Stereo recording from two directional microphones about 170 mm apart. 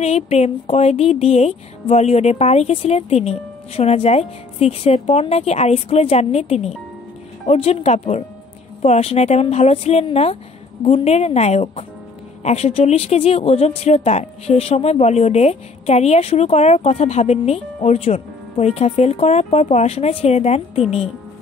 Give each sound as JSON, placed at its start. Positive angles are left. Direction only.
{"t": 0.0, "sound": "speech", "side_deg": 40}